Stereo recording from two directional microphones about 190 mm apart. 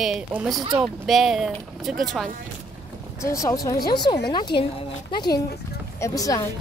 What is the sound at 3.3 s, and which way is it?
Speech, 15° left (ahead or behind).